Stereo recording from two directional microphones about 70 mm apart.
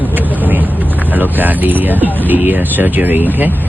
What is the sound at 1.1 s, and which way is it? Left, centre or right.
Speech, right.